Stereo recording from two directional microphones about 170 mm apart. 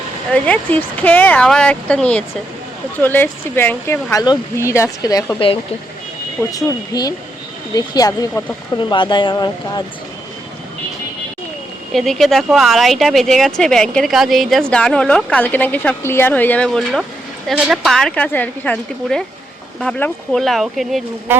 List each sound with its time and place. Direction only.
0.4 s speech: 10° left (ahead or behind)
6.5 s speech: 20° left (ahead or behind)
11.9 s speech: centre (ahead or behind)
21.3 s speech: 15° right (ahead or behind)